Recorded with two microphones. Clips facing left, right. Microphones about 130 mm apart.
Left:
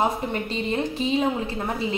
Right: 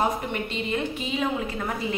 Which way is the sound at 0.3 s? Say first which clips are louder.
Left 2 dB; 35° left (ahead or behind).